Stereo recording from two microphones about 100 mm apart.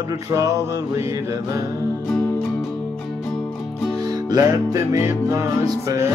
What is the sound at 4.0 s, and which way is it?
Music, 40° right (ahead or behind).